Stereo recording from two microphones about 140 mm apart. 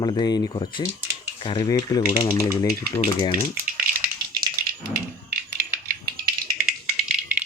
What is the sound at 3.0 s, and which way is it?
Speech, 45° left (ahead or behind).